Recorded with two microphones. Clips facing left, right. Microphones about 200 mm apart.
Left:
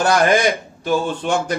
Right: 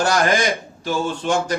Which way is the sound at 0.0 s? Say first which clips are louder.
Left 3 dB; 55° left (ahead or behind).